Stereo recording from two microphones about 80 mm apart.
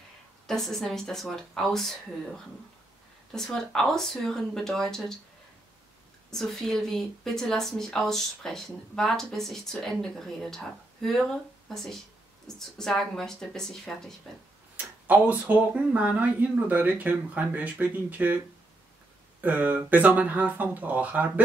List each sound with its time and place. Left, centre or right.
0.5 s speech: centre
6.3 s speech: centre
14.8 s speech: right
19.4 s speech: right